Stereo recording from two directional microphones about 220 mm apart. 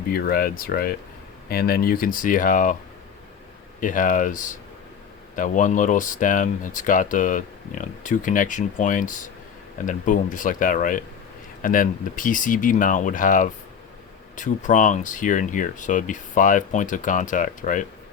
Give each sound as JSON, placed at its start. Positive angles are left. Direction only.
{"t": 0.1, "sound": "speech", "side_deg": 40}
{"t": 3.8, "sound": "speech", "side_deg": 35}